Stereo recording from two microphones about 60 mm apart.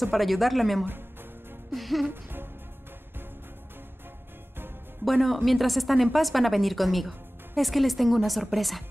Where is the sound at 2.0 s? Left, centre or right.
Right.